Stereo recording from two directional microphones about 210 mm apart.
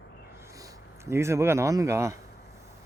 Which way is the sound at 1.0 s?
15° right (ahead or behind).